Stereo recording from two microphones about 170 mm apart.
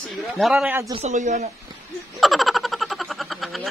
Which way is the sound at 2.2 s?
Centre (ahead or behind).